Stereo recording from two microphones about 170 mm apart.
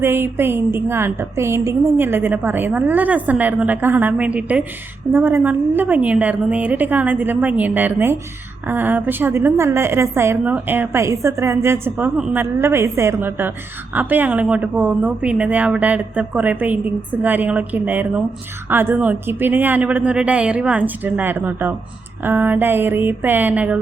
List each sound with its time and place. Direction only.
0.0 s a woman's voice: 15° right (ahead or behind)